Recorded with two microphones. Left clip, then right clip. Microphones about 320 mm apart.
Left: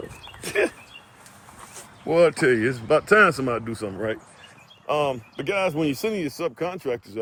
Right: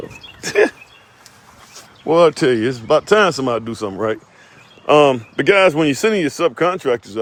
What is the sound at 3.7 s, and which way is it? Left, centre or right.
Speech, right.